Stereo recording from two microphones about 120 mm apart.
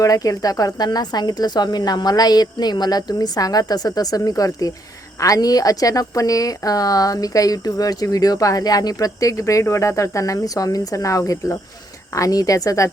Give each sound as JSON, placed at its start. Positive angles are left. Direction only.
{"t": 0.0, "sound": "speech", "side_deg": 30}